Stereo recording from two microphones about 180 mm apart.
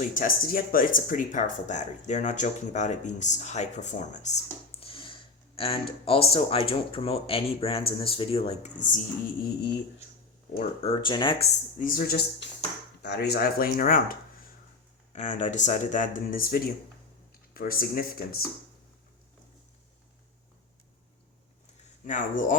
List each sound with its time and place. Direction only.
0.0 s speech: 45° left (ahead or behind)
10.8 s speech: 25° left (ahead or behind)
11.8 s speech: 50° left (ahead or behind)
15.1 s speech: 40° left (ahead or behind)
22.0 s speech: 45° left (ahead or behind)